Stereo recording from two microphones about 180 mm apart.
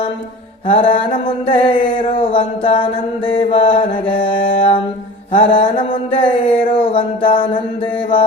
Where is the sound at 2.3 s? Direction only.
30° left (ahead or behind).